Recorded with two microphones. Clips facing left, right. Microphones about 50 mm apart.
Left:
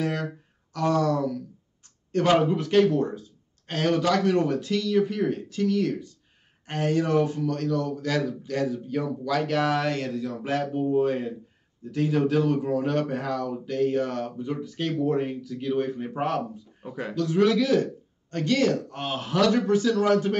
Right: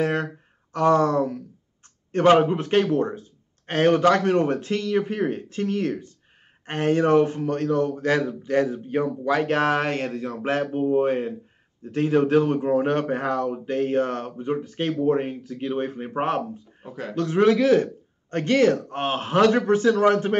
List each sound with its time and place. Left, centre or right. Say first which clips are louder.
0.0 s speech: right 4 dB; right